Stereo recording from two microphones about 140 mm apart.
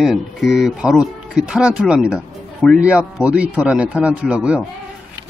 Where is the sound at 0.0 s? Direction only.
Centre (ahead or behind).